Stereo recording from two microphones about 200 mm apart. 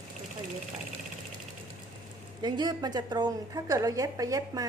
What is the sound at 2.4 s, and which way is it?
A woman's voice, 20° right (ahead or behind).